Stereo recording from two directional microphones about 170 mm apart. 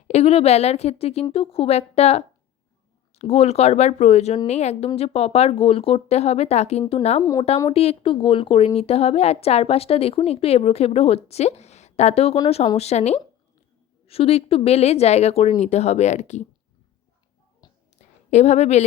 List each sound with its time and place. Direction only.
0.1 s a woman's voice: 40° left (ahead or behind)
7.2 s speech: 20° left (ahead or behind)
7.7 s a woman's voice: 35° left (ahead or behind)
17.9 s a sound: 40° left (ahead or behind)